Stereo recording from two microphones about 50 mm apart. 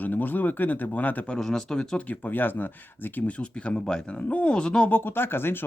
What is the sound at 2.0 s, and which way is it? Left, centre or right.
Speech, left.